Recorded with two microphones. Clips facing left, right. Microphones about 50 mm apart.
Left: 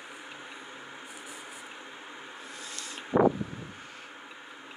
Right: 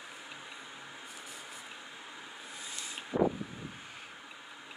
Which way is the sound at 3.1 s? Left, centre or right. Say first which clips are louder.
Left 6 dB; left.